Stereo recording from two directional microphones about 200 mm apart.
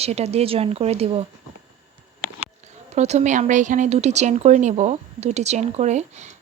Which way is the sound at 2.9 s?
35° right (ahead or behind).